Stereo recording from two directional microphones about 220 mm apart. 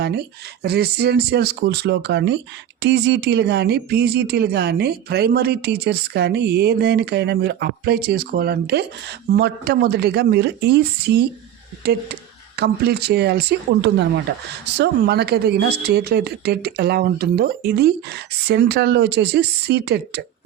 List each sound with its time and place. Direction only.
0.6 s speech: 45° right (ahead or behind)